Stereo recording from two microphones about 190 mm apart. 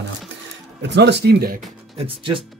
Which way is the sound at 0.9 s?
65° right (ahead or behind).